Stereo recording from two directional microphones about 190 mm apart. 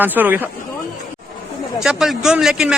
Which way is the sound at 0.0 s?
10° right (ahead or behind).